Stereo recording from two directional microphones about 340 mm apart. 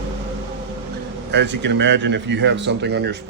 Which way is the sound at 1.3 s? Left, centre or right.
Right.